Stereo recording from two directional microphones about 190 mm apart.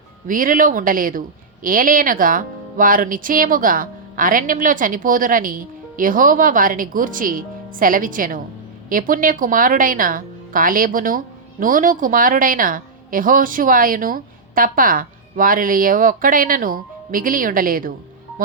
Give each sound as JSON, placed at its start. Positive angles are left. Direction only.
{"t": 0.3, "sound": "speech", "side_deg": -45}